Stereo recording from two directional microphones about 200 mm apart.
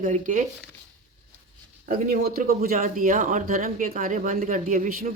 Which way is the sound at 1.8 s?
45° right (ahead or behind).